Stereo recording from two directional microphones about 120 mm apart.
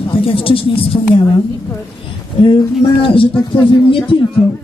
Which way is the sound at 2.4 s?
50° left (ahead or behind).